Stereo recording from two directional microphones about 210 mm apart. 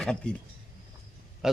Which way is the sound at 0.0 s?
5° left (ahead or behind).